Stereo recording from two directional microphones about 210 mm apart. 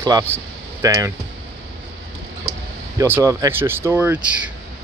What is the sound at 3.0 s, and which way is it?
Speech, 15° right (ahead or behind).